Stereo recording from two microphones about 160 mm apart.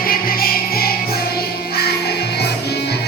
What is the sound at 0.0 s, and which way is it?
Music, 65° left (ahead or behind).